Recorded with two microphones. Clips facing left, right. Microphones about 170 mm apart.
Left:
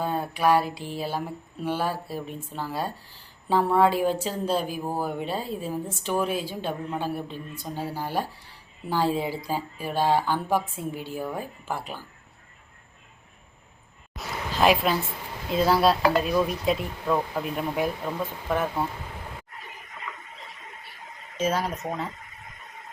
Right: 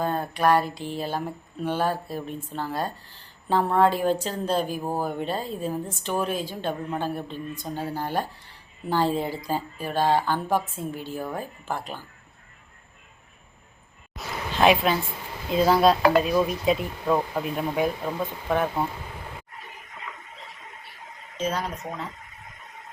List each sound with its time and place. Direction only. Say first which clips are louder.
0.0 s speech: right 1 dB; 10° left (ahead or behind)
4.8 s speech: right 1 dB; 15° right (ahead or behind)
5.0 s speech: right 1 dB; 5° left (ahead or behind)
14.2 s a sound: right 1 dB; centre (ahead or behind)
15.4 s speech: right 2 dB; centre (ahead or behind)
21.3 s speech: left 2 dB; 5° left (ahead or behind)